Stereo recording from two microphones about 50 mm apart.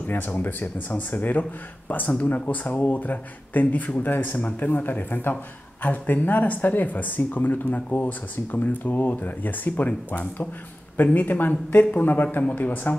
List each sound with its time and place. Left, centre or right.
0.0 s a man's voice: left
4.6 s a man's voice: left